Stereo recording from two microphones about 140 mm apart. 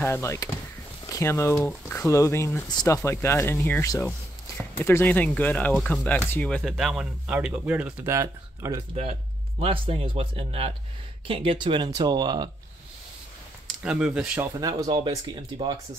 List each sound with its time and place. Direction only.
0.0 s speech: 20° left (ahead or behind)
3.0 s speech: 20° left (ahead or behind)
6.8 s speech: 5° right (ahead or behind); by 8.8 s 20° right (ahead or behind)
9.6 s speech: 40° right (ahead or behind)
13.8 s speech: 5° right (ahead or behind)
14.4 s speech: 25° right (ahead or behind)